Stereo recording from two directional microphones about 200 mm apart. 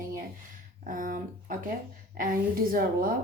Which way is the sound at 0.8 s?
40° right (ahead or behind).